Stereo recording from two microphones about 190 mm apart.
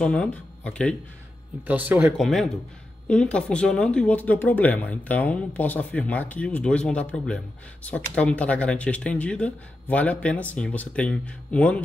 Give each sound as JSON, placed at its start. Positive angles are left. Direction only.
{"t": 0.0, "sound": "speech", "side_deg": 5}
{"t": 1.7, "sound": "speech", "side_deg": -10}
{"t": 2.1, "sound": "speech", "side_deg": 0}